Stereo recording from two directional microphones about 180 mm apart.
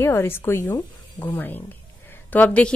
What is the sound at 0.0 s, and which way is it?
A woman's voice, 15° left (ahead or behind).